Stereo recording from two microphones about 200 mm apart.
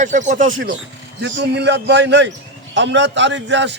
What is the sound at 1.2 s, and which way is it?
A man's voice, 60° right (ahead or behind).